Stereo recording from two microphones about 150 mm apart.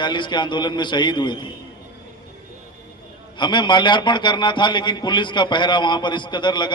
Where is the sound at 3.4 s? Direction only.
30° left (ahead or behind).